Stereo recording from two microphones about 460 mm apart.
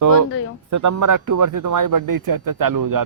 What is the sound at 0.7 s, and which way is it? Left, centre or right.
Speech, right.